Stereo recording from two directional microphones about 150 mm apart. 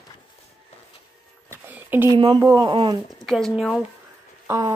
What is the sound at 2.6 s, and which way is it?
Speech, 30° right (ahead or behind).